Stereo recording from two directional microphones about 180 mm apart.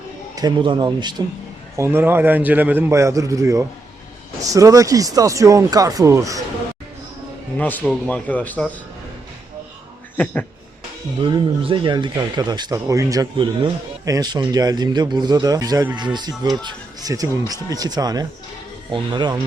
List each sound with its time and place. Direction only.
0.3 s speech: 25° right (ahead or behind)
1.7 s a man's voice: 15° right (ahead or behind)
7.6 s speech: 10° left (ahead or behind)
11.2 s speech: 25° right (ahead or behind)